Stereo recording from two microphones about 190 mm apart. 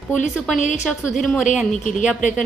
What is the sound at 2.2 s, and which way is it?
Speech, 40° left (ahead or behind).